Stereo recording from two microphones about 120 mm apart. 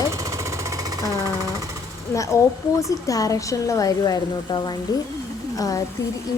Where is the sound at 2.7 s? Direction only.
30° left (ahead or behind).